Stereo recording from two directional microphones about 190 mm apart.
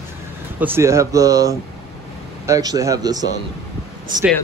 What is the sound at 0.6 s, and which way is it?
Speech, 15° right (ahead or behind).